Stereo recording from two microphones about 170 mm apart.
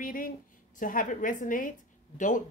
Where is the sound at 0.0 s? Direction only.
55° left (ahead or behind).